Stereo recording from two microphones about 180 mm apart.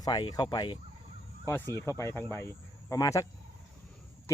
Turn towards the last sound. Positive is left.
turn(degrees=15)  # may be behind; listen again after turning